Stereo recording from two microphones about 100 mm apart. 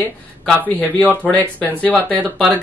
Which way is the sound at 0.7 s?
15° left (ahead or behind).